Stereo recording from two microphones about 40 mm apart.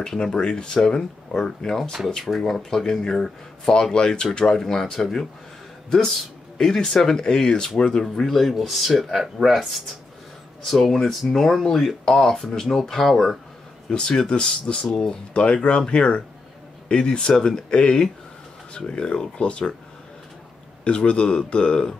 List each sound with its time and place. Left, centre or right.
0.2 s speech: left
1.8 s speech: centre
2.7 s speech: centre
4.6 s speech: centre
6.6 s speech: centre
8.0 s speech: centre
14.3 s speech: left
15.3 s speech: left
20.8 s speech: left